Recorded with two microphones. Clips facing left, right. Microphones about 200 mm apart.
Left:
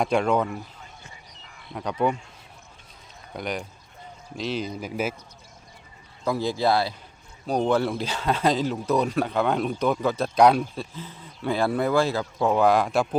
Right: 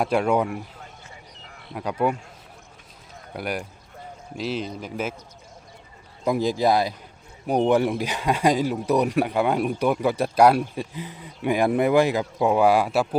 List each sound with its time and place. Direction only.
0.0 s speech: 5° right (ahead or behind)
1.7 s speech: 5° right (ahead or behind)
3.3 s speech: 5° right (ahead or behind)
6.2 s speech: 20° right (ahead or behind)